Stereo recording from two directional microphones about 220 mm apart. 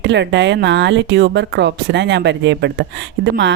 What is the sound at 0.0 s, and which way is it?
Speech, 55° right (ahead or behind).